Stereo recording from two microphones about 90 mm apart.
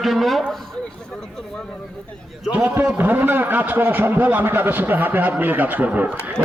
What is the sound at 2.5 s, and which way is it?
A man's voice, 15° right (ahead or behind).